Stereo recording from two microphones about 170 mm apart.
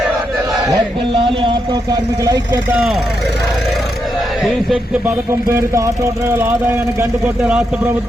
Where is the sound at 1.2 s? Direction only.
30° right (ahead or behind); by 3.0 s 5° right (ahead or behind).